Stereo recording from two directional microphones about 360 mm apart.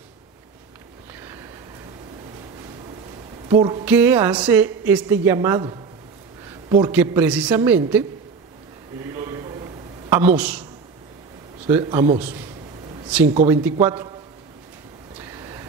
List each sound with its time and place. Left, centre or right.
3.4 s a sound: centre
3.8 s a woman's voice: centre
9.1 s a sound: centre
10.0 s speech: centre
11.6 s a woman's voice: centre
13.5 s a woman's voice: centre
15.1 s vehicle: centre